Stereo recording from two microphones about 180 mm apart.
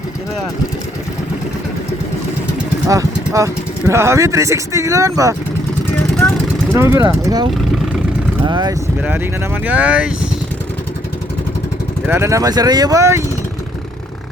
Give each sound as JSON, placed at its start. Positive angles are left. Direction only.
{"t": 2.8, "sound": "speech", "side_deg": -20}
{"t": 6.7, "sound": "speech", "side_deg": -15}
{"t": 8.4, "sound": "speech", "side_deg": -25}
{"t": 9.0, "sound": "speech", "side_deg": -10}
{"t": 12.0, "sound": "speech", "side_deg": -15}